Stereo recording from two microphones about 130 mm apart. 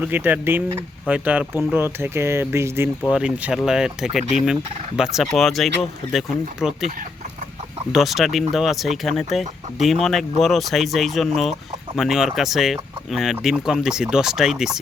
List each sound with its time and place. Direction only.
0.0 s speech: 15° right (ahead or behind)
3.1 s speech: 5° right (ahead or behind)
4.2 s fowl: 65° left (ahead or behind)
4.9 s speech: 5° right (ahead or behind)
7.9 s speech: centre (ahead or behind)